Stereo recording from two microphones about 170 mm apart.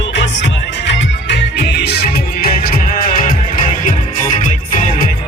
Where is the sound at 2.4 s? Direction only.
60° left (ahead or behind).